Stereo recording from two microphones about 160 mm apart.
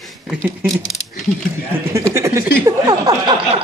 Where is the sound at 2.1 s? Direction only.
20° right (ahead or behind).